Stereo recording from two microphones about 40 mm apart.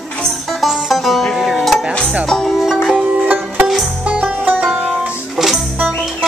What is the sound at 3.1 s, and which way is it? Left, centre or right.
Music, right.